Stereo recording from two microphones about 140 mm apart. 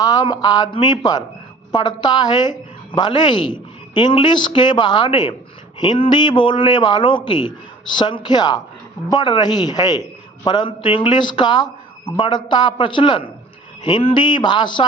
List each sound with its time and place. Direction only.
0.0 s a man's voice: 30° left (ahead or behind)